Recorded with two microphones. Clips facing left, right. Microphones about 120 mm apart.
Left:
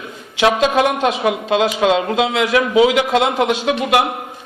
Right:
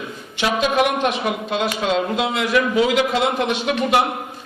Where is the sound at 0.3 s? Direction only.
90° left.